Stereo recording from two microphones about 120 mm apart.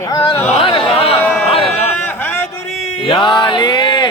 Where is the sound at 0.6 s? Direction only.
50° left (ahead or behind).